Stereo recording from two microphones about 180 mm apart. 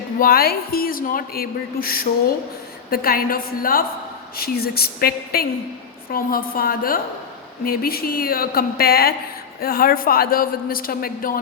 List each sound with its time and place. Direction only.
0.2 s speech: 55° left (ahead or behind)